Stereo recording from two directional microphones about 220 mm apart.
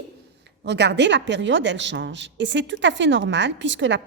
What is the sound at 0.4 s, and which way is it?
Speech, 50° right (ahead or behind).